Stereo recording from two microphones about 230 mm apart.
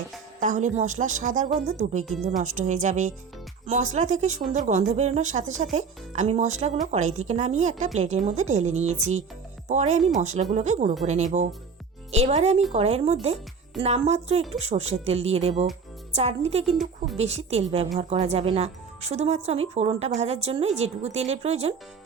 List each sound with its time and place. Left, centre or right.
0.3 s speech: right